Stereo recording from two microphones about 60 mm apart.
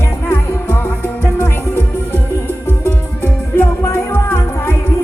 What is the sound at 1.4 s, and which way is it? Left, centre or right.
Music, left.